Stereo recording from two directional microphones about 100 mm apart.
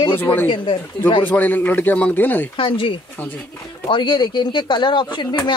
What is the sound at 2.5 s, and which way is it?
Speech, 55° left (ahead or behind).